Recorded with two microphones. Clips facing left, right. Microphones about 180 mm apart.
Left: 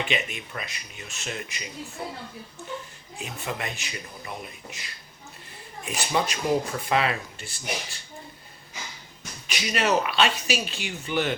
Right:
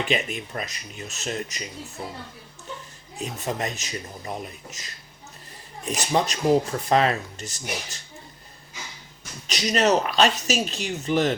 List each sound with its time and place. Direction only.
0.1 s speech: 40° right (ahead or behind)
3.2 s speech: 40° right (ahead or behind)
9.5 s speech: 40° right (ahead or behind)